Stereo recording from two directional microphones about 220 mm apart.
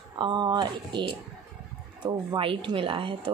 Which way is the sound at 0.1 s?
20° right (ahead or behind).